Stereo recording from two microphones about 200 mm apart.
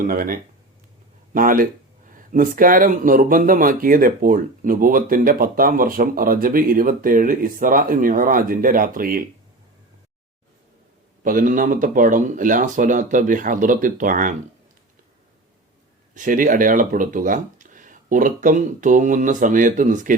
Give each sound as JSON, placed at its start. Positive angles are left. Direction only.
{"t": 0.0, "sound": "speech", "side_deg": -45}
{"t": 11.2, "sound": "speech", "side_deg": -40}
{"t": 16.1, "sound": "speech", "side_deg": -40}